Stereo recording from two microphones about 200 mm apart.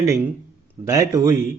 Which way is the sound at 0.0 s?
15° right (ahead or behind).